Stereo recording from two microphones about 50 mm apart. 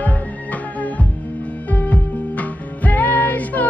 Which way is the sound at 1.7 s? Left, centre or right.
Left.